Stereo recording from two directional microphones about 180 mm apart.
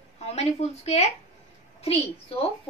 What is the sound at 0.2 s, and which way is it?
A woman's voice, 35° left (ahead or behind).